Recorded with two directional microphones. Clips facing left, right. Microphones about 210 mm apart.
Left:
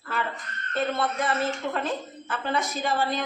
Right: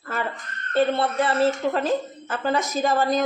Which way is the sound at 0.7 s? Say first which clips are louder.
Right 6 dB; 30° right (ahead or behind).